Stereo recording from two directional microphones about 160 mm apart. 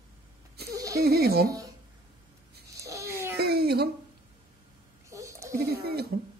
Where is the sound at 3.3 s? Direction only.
85° right.